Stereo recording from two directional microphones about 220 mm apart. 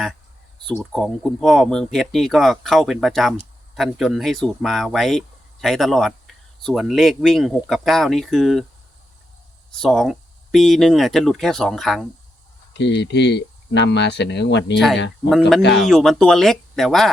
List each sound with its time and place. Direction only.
0.6 s speech: centre (ahead or behind)
9.8 s speech: centre (ahead or behind)
12.7 s speech: 55° left (ahead or behind)
15.3 s speech: centre (ahead or behind)